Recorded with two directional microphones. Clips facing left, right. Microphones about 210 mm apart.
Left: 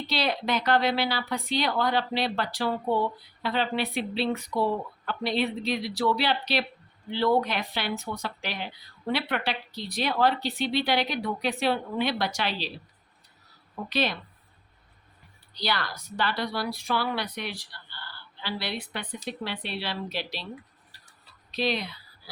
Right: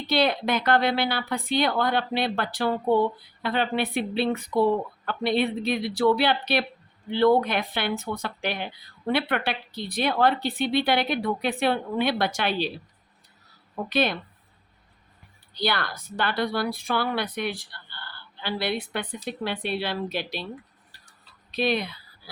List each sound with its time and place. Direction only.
0.1 s speech: 55° right (ahead or behind)
13.9 s speech: 55° right (ahead or behind)
15.5 s speech: 55° right (ahead or behind)
21.5 s speech: 55° right (ahead or behind)